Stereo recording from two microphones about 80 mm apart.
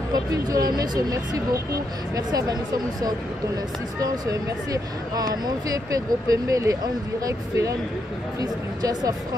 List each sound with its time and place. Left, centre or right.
0.1 s speech: right
4.0 s speech: right